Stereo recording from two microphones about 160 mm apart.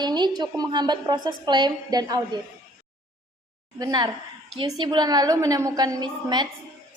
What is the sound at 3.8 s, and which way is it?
A woman's voice, 25° right (ahead or behind).